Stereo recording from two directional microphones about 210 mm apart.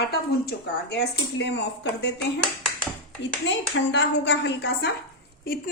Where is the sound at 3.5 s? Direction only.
60° left (ahead or behind).